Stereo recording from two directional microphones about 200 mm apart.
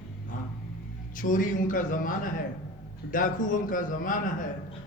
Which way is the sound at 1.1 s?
40° left (ahead or behind).